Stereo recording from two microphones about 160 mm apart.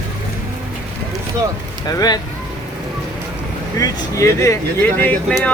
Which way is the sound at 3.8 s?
20° left (ahead or behind).